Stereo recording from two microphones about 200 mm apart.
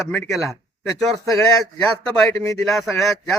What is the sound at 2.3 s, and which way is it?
Speech, 15° left (ahead or behind).